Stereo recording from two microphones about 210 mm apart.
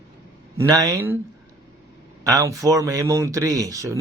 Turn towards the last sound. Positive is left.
turn(degrees=-15)  # may be behind; listen again after turning